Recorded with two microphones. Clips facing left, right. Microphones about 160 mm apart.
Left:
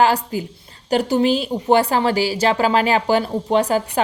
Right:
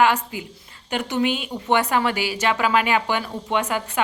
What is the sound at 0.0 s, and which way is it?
A woman's voice, 35° left (ahead or behind).